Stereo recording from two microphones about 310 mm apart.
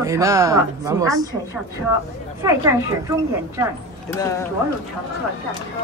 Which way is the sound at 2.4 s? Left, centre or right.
Centre.